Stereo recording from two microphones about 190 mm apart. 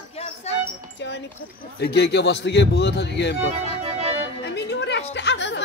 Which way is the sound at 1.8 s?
60° left (ahead or behind).